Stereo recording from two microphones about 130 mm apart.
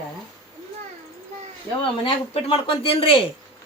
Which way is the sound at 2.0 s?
50° left (ahead or behind).